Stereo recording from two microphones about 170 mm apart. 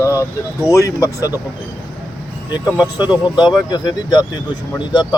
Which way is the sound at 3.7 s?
25° left (ahead or behind).